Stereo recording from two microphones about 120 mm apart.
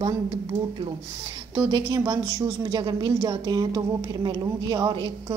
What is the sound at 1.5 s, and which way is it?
A woman's voice, 35° right (ahead or behind).